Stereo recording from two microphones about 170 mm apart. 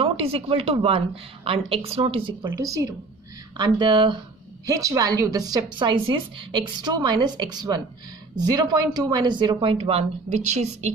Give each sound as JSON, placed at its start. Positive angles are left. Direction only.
{"t": 0.0, "sound": "a woman's voice", "side_deg": -35}